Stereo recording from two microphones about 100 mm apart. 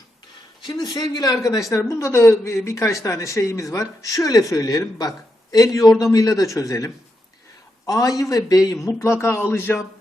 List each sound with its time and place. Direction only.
0.7 s a man's voice: 40° left (ahead or behind); by 9.8 s 25° left (ahead or behind)